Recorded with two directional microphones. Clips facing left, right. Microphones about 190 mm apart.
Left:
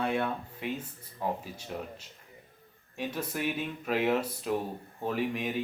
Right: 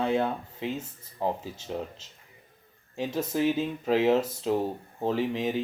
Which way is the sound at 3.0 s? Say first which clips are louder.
Right 6 dB; 25° right (ahead or behind).